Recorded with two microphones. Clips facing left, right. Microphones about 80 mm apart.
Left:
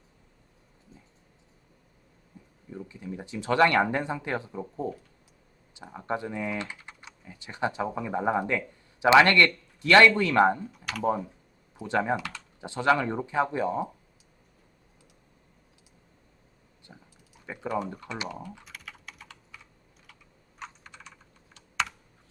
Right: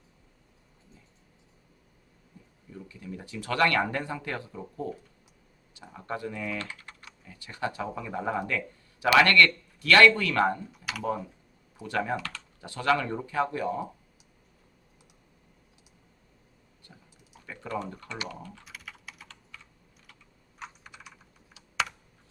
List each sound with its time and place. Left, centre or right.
2.7 s speech: left
5.7 s speech: left
10.7 s speech: centre
11.0 s speech: left
16.8 s speech: left
18.6 s typing: centre
19.3 s computer keyboard: centre
20.6 s computer keyboard: centre